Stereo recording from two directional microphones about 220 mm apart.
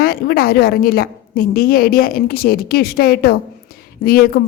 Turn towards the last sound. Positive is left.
turn(degrees=45)  # may be behind; listen again after turning